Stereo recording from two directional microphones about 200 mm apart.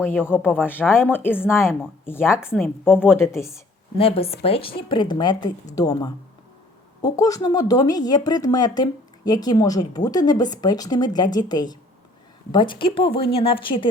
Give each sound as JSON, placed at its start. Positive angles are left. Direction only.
{"t": 0.0, "sound": "speech", "side_deg": 10}
{"t": 1.5, "sound": "a woman's voice", "side_deg": -5}
{"t": 3.9, "sound": "speech", "side_deg": 30}